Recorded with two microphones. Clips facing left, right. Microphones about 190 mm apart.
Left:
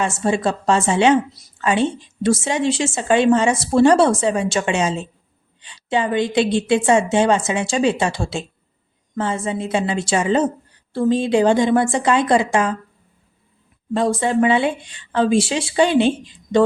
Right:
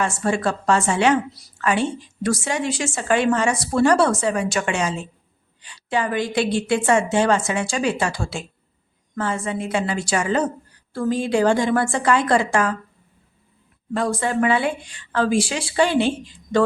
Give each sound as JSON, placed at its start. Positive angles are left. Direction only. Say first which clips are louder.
{"t": 0.0, "sound": "a woman's voice", "louder": "left 2 dB", "side_deg": 20}
{"t": 13.9, "sound": "a woman's voice", "louder": "left 4 dB", "side_deg": 25}